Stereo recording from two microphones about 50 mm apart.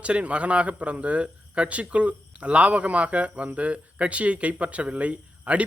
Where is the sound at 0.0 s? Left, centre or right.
Right.